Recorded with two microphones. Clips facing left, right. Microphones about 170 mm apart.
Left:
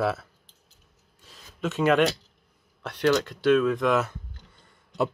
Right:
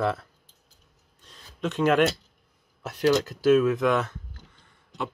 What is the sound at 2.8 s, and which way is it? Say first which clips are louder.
Speech: right 1 dB; 5° right (ahead or behind).